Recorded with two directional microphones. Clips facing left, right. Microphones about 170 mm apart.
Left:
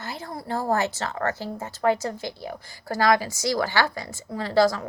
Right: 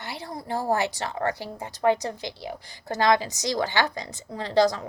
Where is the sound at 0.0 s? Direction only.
15° right (ahead or behind).